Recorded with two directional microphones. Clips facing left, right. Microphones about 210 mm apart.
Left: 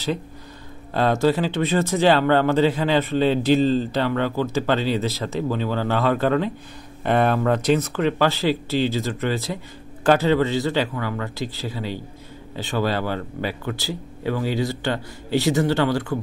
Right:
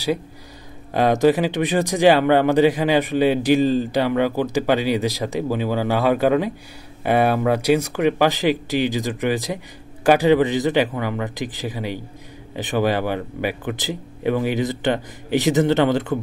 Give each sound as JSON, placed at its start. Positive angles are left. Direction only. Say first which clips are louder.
{"t": 0.9, "sound": "speech", "louder": "right 3 dB", "side_deg": -15}